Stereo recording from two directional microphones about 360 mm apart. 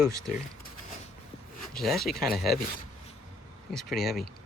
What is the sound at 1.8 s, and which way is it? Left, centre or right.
Speech, centre.